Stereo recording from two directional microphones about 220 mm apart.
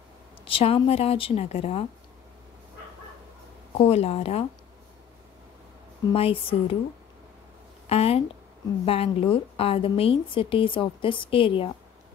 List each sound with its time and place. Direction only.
0.5 s a woman's voice: 25° left (ahead or behind)
3.7 s a woman's voice: 30° left (ahead or behind)
6.1 s a woman's voice: 25° left (ahead or behind)
7.8 s a woman's voice: 25° left (ahead or behind)